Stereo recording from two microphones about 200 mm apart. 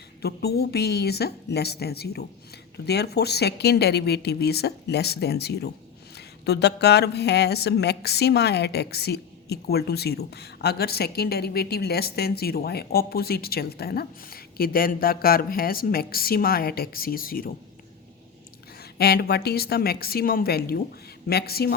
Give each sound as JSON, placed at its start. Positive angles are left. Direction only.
{"t": 0.2, "sound": "speech", "side_deg": 50}
{"t": 18.8, "sound": "speech", "side_deg": 50}